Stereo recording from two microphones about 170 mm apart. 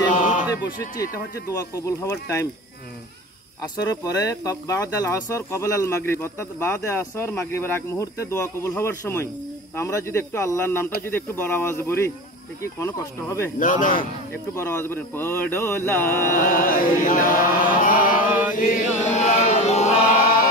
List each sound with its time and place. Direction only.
0.1 s a sound: 50° left (ahead or behind)
1.6 s speech: 20° left (ahead or behind)
3.7 s speech: 20° left (ahead or behind)
13.6 s speech: 50° left (ahead or behind)
14.3 s speech: 15° left (ahead or behind)
16.3 s a sound: 55° left (ahead or behind)
17.0 s chant: 50° left (ahead or behind)